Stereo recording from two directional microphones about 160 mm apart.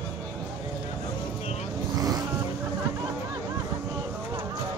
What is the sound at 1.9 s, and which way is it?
Vehicle, 20° right (ahead or behind).